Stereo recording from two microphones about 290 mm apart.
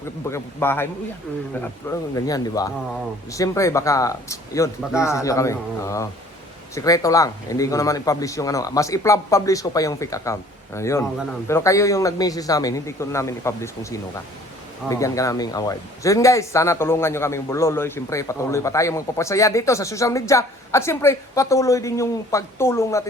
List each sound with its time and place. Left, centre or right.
0.3 s speech: centre